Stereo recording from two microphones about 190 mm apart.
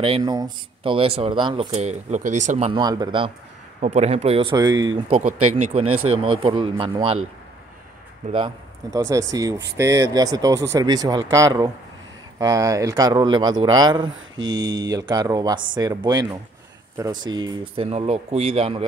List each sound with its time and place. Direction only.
0.0 s speech: 25° right (ahead or behind)
1.8 s a man's voice: 35° right (ahead or behind)
2.7 s speech: 20° right (ahead or behind)
3.8 s speech: 35° right (ahead or behind)
5.2 s a man's voice: 35° right (ahead or behind)
8.9 s speech: 15° right (ahead or behind)
14.1 s mantra: 90° right
14.5 s speech: 20° right (ahead or behind)
17.8 s a man's voice: 35° right (ahead or behind)